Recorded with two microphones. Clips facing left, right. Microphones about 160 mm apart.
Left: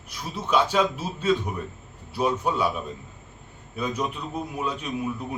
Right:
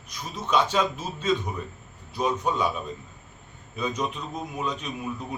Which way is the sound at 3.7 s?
10° left (ahead or behind).